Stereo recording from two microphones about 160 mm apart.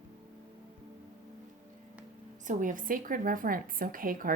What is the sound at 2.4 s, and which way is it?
A woman's voice, 55° right (ahead or behind).